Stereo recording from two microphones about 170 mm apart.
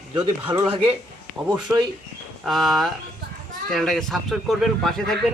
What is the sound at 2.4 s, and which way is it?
Speech, centre (ahead or behind).